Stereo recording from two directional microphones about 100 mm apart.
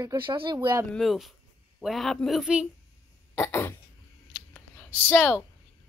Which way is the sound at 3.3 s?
25° left (ahead or behind).